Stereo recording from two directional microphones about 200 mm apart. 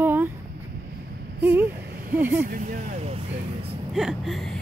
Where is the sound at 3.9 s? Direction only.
Centre (ahead or behind).